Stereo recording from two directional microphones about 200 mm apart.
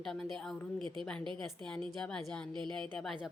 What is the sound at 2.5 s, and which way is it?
Speech, 25° right (ahead or behind).